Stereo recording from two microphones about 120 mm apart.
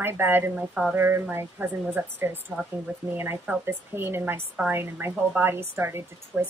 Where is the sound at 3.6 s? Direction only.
20° right (ahead or behind).